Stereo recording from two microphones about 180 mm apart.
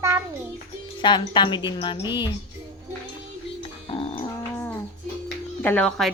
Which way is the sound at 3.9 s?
30° left (ahead or behind).